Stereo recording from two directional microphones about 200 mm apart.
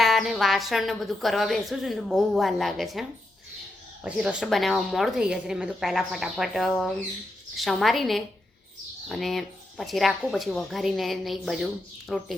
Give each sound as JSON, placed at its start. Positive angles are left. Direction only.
{"t": 0.0, "sound": "a woman's voice", "side_deg": 0}